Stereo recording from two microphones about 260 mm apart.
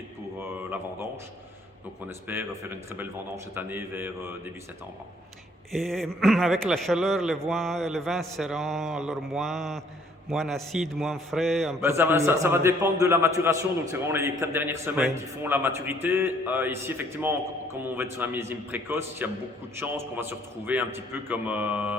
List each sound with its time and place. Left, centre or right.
2.0 s a man's voice: centre
5.7 s a man's voice: centre